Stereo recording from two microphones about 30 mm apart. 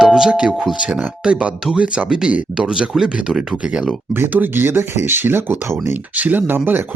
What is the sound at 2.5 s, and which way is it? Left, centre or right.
Speech, right.